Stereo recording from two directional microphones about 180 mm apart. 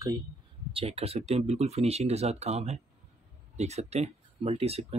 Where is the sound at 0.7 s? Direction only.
35° right (ahead or behind).